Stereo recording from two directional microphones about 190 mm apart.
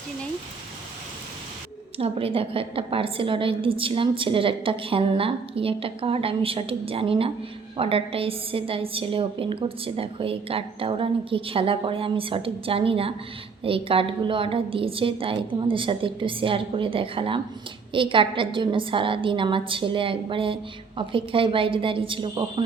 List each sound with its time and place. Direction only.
2.0 s a woman's voice: 30° right (ahead or behind)